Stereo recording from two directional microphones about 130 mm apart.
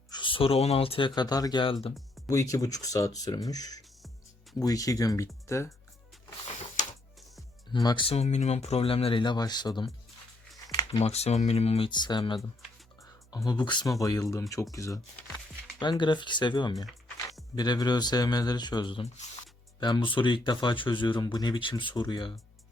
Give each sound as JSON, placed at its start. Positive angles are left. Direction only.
{"t": 0.1, "sound": "speech", "side_deg": 40}
{"t": 1.6, "sound": "speech", "side_deg": 45}
{"t": 2.2, "sound": "speech", "side_deg": 25}
{"t": 7.7, "sound": "speech", "side_deg": 35}
{"t": 8.1, "sound": "speech", "side_deg": 60}
{"t": 10.7, "sound": "a sound", "side_deg": 35}
{"t": 11.0, "sound": "speech", "side_deg": 55}
{"t": 11.9, "sound": "speech", "side_deg": 35}
{"t": 15.8, "sound": "speech", "side_deg": 35}